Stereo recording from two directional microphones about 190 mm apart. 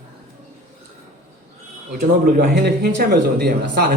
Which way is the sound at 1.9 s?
45° right (ahead or behind).